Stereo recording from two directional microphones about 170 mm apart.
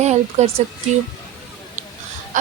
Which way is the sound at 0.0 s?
40° right (ahead or behind).